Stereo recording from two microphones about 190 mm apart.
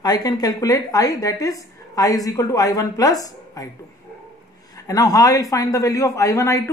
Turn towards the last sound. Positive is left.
turn(degrees=15)  # may be behind; listen again after turning